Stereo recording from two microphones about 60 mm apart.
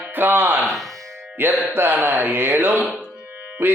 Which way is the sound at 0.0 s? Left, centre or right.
Right.